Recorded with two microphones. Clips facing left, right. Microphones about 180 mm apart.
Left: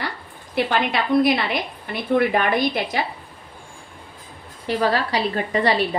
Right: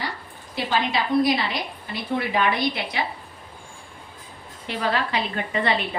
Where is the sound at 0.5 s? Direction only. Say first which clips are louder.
Left 3 dB; 60° left (ahead or behind).